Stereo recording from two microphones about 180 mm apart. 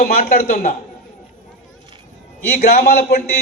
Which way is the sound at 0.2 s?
45° left (ahead or behind).